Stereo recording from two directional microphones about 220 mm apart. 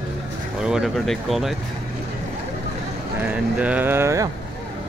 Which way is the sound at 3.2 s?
5° right (ahead or behind).